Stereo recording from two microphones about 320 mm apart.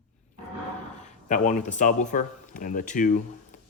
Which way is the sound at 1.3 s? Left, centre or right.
Left.